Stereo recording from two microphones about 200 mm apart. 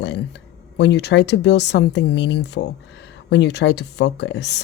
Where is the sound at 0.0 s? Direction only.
60° left (ahead or behind).